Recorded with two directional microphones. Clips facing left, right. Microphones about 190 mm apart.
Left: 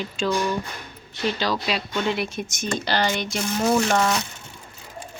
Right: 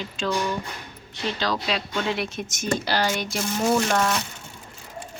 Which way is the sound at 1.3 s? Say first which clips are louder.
Left 1 dB; 5° left (ahead or behind).